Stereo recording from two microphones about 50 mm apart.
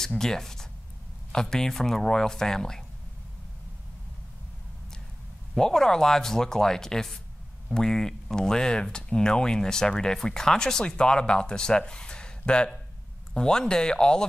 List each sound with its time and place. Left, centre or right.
0.2 s speech: centre
5.5 s speech: centre